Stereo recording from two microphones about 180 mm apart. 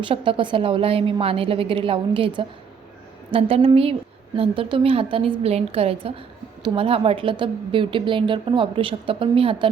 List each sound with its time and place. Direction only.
0.0 s a woman's voice: 30° right (ahead or behind)
3.5 s a woman's voice: 30° right (ahead or behind)